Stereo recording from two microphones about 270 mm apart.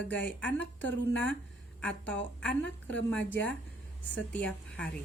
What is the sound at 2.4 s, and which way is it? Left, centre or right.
A woman's voice, centre.